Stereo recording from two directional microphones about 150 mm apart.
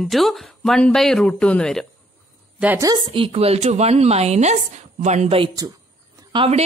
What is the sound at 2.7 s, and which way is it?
Speech, 25° right (ahead or behind).